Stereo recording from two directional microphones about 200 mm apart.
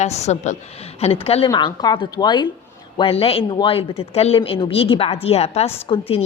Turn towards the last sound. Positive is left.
turn(degrees=30)  # may be behind; listen again after turning